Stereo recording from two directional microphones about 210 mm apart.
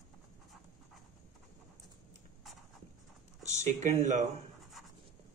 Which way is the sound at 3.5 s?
35° right (ahead or behind).